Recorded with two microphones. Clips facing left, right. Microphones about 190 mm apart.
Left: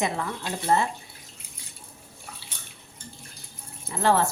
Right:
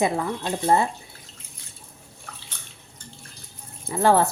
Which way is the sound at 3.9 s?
35° right (ahead or behind).